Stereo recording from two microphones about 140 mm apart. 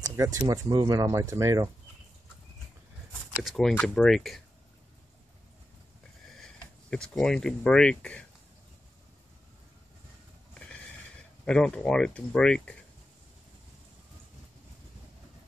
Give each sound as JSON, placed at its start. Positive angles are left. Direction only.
{"t": 0.0, "sound": "speech", "side_deg": -20}
{"t": 3.4, "sound": "speech", "side_deg": 0}
{"t": 6.9, "sound": "speech", "side_deg": 5}
{"t": 11.4, "sound": "speech", "side_deg": 5}